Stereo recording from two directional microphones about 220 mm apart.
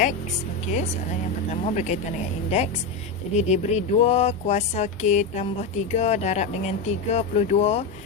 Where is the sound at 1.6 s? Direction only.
30° left (ahead or behind).